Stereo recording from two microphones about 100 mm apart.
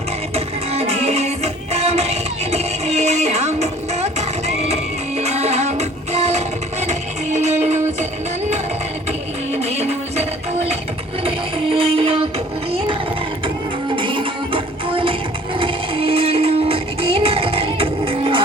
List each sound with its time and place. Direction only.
0.3 s music: 90° right
9.5 s music: 90° right
11.2 s music: 70° right (ahead or behind)
13.9 s music: 55° right (ahead or behind)